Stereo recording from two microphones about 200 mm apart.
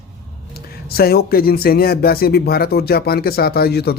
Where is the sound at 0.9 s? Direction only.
50° left (ahead or behind).